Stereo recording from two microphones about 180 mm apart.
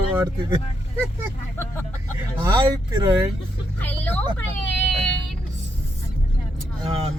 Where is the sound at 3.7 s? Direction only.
10° left (ahead or behind).